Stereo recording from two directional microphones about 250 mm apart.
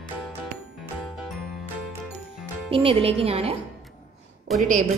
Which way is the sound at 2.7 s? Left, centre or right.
Right.